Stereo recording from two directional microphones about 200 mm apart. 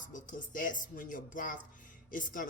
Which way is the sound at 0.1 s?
40° left (ahead or behind).